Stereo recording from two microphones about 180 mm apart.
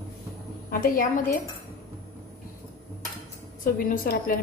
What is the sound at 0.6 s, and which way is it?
Speech, 50° left (ahead or behind).